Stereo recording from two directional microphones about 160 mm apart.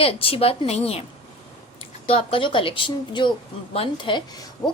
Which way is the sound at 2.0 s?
35° left (ahead or behind).